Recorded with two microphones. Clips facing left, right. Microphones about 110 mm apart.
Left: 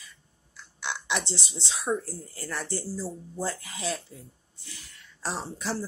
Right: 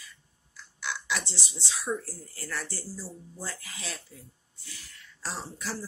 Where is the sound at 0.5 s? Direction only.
25° left (ahead or behind).